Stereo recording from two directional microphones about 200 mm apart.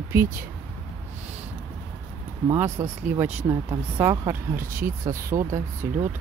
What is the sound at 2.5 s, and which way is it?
Speech, 10° right (ahead or behind).